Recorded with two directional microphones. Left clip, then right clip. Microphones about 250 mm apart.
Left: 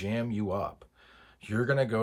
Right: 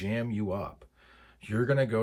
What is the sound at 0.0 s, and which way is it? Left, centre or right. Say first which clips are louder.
Speech: even; centre.